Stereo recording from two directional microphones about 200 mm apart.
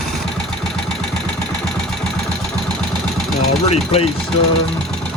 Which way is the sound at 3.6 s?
30° left (ahead or behind).